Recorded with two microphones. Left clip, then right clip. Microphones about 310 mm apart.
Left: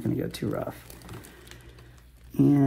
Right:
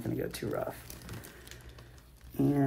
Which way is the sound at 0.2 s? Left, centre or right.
Left.